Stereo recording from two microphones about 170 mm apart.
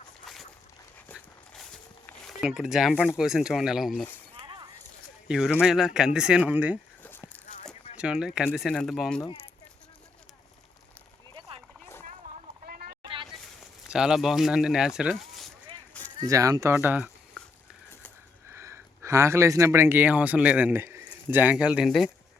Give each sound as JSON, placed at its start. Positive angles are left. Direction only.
{"t": 1.1, "sound": "dog", "side_deg": 0}
{"t": 2.4, "sound": "speech", "side_deg": -5}
{"t": 4.4, "sound": "a sound", "side_deg": -30}
{"t": 5.3, "sound": "speech", "side_deg": -5}
{"t": 7.0, "sound": "a sound", "side_deg": 10}
{"t": 7.9, "sound": "speech", "side_deg": -5}
{"t": 11.3, "sound": "a sound", "side_deg": -35}
{"t": 12.6, "sound": "vehicle", "side_deg": -60}
{"t": 13.8, "sound": "speech", "side_deg": -5}
{"t": 16.2, "sound": "speech", "side_deg": -20}
{"t": 18.5, "sound": "speech", "side_deg": -15}